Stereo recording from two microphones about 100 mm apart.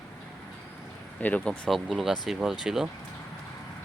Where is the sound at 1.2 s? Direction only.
15° left (ahead or behind).